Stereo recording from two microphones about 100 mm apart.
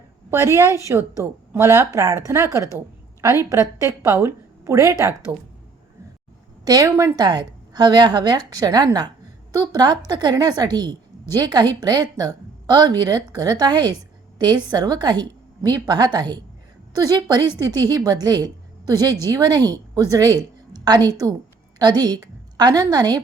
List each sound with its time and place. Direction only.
0.3 s a woman's voice: 30° right (ahead or behind)
2.7 s a sound: 30° right (ahead or behind)
3.5 s a woman's voice: 30° right (ahead or behind)
6.7 s a woman's voice: 35° right (ahead or behind)